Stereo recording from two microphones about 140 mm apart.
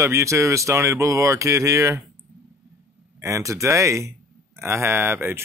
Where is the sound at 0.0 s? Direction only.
20° right (ahead or behind).